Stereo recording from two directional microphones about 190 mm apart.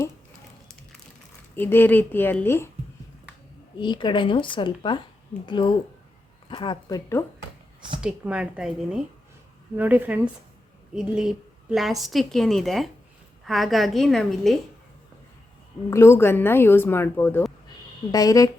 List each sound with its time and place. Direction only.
1.5 s speech: 10° left (ahead or behind)
3.8 s speech: 25° left (ahead or behind)
8.0 s speech: 5° right (ahead or behind)
15.9 s speech: 15° left (ahead or behind)